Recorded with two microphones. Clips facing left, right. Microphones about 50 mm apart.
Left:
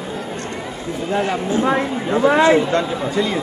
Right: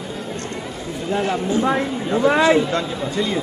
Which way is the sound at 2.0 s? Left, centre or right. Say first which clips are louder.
Left 2 dB; centre.